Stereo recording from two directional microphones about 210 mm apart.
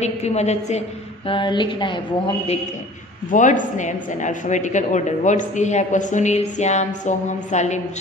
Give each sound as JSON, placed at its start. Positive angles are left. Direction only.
{"t": 0.0, "sound": "a woman's voice", "side_deg": 30}
{"t": 3.3, "sound": "speech", "side_deg": 35}